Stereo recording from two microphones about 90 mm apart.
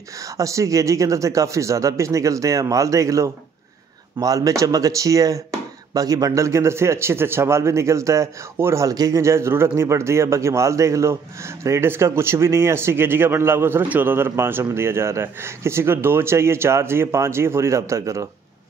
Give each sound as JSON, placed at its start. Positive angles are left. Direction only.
{"t": 0.2, "sound": "speech", "side_deg": -35}
{"t": 8.8, "sound": "speech", "side_deg": -40}